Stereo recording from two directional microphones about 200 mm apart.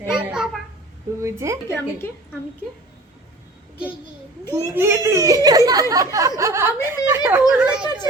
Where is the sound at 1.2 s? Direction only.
15° right (ahead or behind).